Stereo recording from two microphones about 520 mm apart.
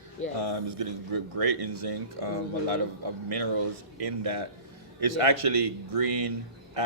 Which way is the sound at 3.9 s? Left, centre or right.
Right.